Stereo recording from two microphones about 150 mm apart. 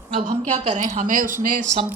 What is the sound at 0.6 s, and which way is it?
Speech, 50° right (ahead or behind).